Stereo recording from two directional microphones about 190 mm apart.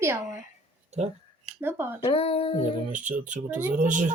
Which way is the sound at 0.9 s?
35° right (ahead or behind).